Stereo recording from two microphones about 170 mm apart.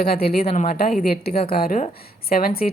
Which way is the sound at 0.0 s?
65° left (ahead or behind).